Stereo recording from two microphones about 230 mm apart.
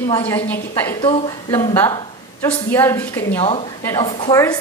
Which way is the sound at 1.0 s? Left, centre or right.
Centre.